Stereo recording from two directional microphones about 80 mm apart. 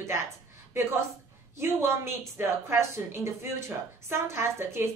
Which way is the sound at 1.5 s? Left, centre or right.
Right.